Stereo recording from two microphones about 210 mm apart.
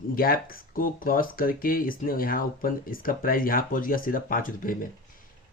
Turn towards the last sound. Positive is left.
turn(degrees=40)  # may be behind; listen again after turning